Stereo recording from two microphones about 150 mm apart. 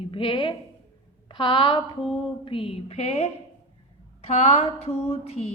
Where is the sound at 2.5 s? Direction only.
40° left (ahead or behind).